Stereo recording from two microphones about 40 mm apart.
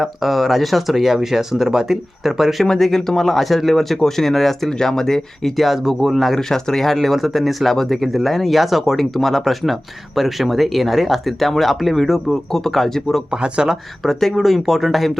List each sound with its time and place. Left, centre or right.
0.0 s speech: centre
2.6 s speech: centre
5.5 s speech: centre
6.5 s speech: centre
13.3 s speech: centre
14.0 s speech: centre